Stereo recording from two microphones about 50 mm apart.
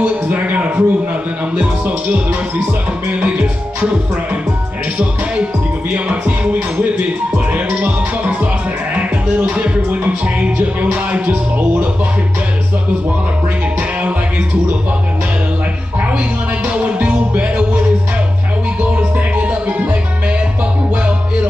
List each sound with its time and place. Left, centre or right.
0.0 s a sound: right
1.6 s speech: right
4.9 s music: right
9.4 s speech: right
16.6 s music: right